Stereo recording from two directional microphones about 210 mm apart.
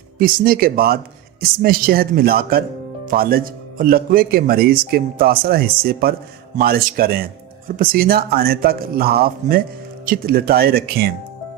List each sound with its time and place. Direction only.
0.2 s speech: 45° right (ahead or behind)